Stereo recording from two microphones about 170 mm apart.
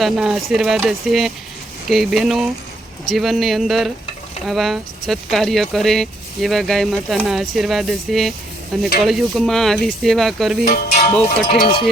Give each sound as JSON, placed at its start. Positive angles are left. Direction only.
{"t": 0.0, "sound": "speech", "side_deg": 0}
{"t": 11.0, "sound": "music", "side_deg": 55}